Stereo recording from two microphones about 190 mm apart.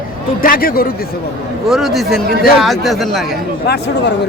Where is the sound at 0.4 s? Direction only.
50° left (ahead or behind).